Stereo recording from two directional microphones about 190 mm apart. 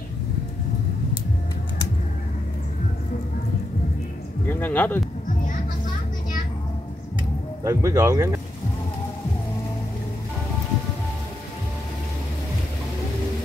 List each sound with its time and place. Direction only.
4.5 s music: 10° left (ahead or behind)
7.6 s speech: 15° right (ahead or behind)